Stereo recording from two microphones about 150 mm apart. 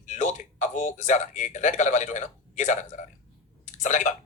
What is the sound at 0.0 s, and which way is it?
A man's voice, 55° left (ahead or behind).